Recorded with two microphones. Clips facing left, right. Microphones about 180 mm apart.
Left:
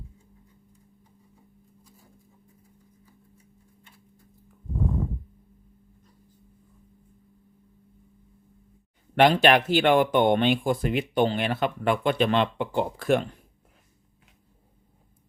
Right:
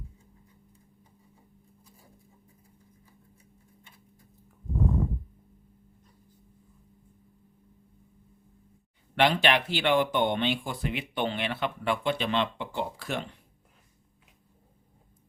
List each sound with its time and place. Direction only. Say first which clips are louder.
9.1 s speech: left 6 dB; 45° left (ahead or behind)